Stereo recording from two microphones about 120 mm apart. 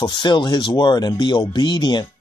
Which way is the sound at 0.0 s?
40° left (ahead or behind).